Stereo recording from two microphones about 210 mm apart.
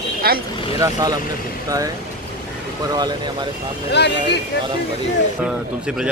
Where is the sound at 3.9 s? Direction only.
55° left (ahead or behind).